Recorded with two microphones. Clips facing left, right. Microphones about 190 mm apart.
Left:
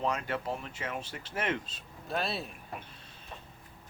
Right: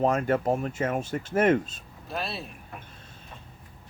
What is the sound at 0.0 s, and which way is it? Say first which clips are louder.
Speech: right 9 dB; 50° right (ahead or behind).